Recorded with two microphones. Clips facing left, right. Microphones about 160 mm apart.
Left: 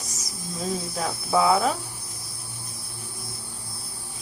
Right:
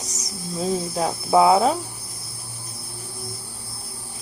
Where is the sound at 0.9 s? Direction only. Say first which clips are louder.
Right 6 dB; 30° right (ahead or behind).